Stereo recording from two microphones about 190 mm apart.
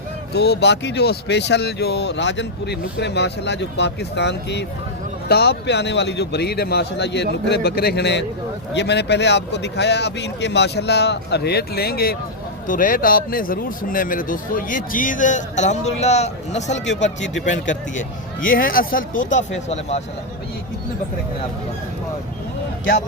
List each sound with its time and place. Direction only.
0.3 s speech: 60° left (ahead or behind); by 16.7 s 35° left (ahead or behind)
16.7 s speech: 70° left (ahead or behind)
17.4 s speech: 40° left (ahead or behind)
19.6 s speech: 35° left (ahead or behind)